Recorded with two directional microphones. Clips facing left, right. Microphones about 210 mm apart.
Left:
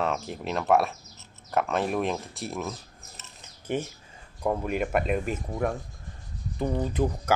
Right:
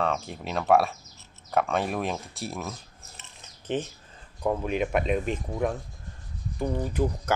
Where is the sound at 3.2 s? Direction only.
10° left (ahead or behind).